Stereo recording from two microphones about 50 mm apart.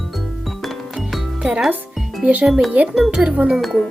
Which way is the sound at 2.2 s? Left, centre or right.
Right.